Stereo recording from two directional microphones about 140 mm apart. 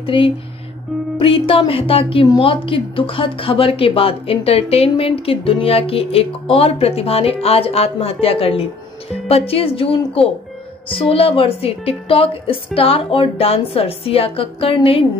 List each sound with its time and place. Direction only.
0.0 s speech: 40° left (ahead or behind)